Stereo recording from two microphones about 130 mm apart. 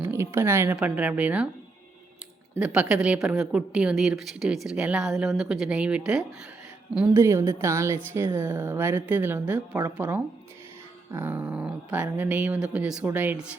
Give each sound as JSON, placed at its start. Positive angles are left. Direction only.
{"t": 0.1, "sound": "a woman's voice", "side_deg": -20}
{"t": 2.6, "sound": "a woman's voice", "side_deg": -5}
{"t": 7.1, "sound": "a woman's voice", "side_deg": -20}
{"t": 11.1, "sound": "a woman's voice", "side_deg": -15}